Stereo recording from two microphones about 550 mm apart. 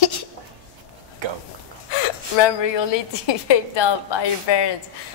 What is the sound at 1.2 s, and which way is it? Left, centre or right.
Speech, right.